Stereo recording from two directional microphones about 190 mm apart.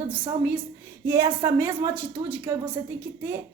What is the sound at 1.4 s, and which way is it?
A woman's voice, 10° right (ahead or behind).